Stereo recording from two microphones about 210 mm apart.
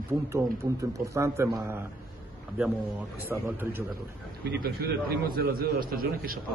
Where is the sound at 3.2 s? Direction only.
10° right (ahead or behind).